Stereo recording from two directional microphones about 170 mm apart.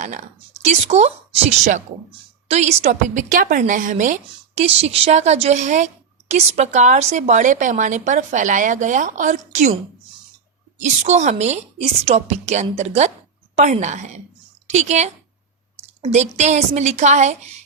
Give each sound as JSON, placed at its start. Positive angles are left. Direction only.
{"t": 0.0, "sound": "a woman's voice", "side_deg": -45}
{"t": 2.9, "sound": "a woman's voice", "side_deg": -55}
{"t": 10.8, "sound": "a woman's voice", "side_deg": -45}